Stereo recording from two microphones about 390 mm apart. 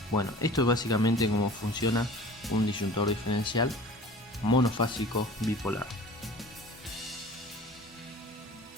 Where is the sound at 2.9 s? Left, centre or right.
Left.